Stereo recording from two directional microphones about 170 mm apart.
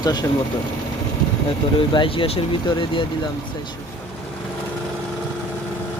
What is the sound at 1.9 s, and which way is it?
Speech, 30° left (ahead or behind).